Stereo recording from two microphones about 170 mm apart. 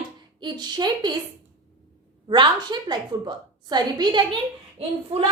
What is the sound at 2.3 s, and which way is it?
A woman's voice, 25° right (ahead or behind).